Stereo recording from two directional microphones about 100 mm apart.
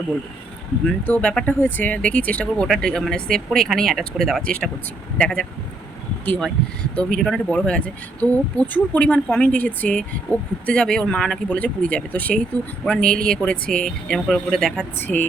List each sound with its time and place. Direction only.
0.9 s speech: 15° left (ahead or behind)
6.9 s speech: 10° left (ahead or behind)
14.9 s a woman's voice: 20° left (ahead or behind)